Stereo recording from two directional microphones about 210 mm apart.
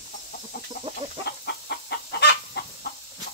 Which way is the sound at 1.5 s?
50° left (ahead or behind).